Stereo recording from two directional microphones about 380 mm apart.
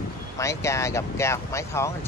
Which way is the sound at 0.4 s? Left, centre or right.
Centre.